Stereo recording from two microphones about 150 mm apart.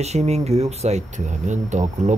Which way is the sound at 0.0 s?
45° right (ahead or behind).